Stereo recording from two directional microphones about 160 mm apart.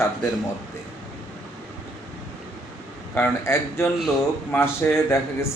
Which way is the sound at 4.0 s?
Centre (ahead or behind).